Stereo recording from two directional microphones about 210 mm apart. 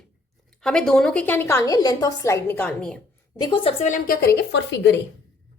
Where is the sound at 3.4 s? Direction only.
20° left (ahead or behind); by 5.0 s 55° left (ahead or behind).